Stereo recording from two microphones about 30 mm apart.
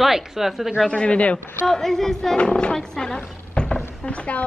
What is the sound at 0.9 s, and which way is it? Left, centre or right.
Speech, left.